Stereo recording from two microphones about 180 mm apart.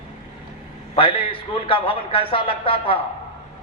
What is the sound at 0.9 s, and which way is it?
A man's voice, 30° left (ahead or behind).